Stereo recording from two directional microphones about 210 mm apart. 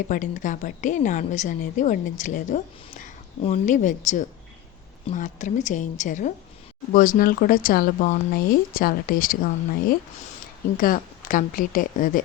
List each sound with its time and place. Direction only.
0.1 s a woman's voice: 35° left (ahead or behind)